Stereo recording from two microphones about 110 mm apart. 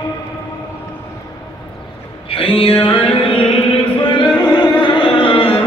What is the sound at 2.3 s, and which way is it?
Music, 55° left (ahead or behind).